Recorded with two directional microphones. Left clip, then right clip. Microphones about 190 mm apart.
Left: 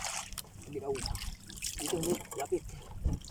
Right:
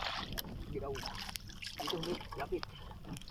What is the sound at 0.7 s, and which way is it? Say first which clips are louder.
Boat: left 3 dB; 20° left (ahead or behind).